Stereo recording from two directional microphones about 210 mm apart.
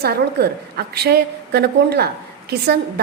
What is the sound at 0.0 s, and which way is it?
A woman's voice, 50° right (ahead or behind).